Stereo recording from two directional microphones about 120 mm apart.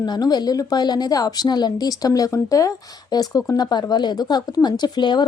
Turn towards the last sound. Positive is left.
turn(degrees=35)  # may be behind; listen again after turning